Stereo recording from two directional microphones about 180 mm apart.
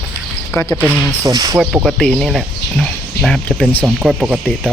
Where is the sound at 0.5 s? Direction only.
15° left (ahead or behind).